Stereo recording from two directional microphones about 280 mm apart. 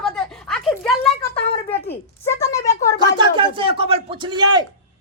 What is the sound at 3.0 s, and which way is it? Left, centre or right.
A man's voice, centre.